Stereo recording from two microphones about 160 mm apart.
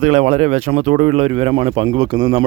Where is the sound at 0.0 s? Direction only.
45° right (ahead or behind).